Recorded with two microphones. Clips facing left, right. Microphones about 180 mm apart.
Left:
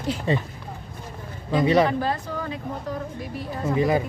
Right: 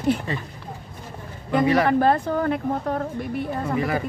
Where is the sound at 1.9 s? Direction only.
55° right (ahead or behind).